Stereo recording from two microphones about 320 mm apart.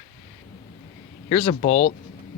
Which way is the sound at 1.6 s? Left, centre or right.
Left.